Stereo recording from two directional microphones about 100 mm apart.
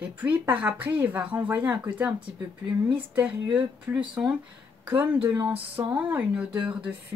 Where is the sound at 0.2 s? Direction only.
15° right (ahead or behind).